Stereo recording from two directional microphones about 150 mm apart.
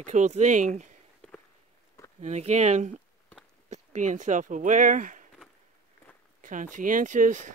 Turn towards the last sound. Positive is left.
turn(degrees=-55)  # may be behind; listen again after turning